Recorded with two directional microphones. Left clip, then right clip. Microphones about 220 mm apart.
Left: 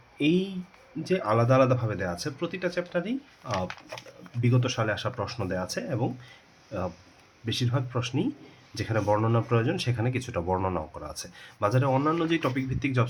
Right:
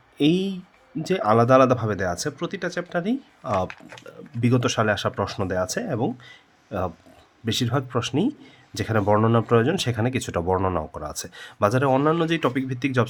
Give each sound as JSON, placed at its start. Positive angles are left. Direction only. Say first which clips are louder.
{"t": 0.2, "sound": "speech", "louder": "right 4 dB", "side_deg": -50}